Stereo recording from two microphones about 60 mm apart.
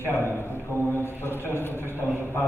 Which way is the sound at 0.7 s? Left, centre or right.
Left.